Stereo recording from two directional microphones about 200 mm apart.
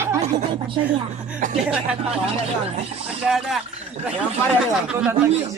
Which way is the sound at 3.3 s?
Centre (ahead or behind).